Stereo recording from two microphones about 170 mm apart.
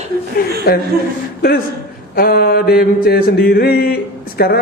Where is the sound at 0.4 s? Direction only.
60° left (ahead or behind).